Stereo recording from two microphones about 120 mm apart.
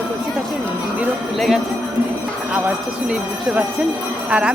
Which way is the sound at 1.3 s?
Centre (ahead or behind).